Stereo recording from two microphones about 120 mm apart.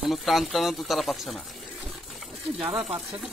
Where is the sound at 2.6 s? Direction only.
10° right (ahead or behind).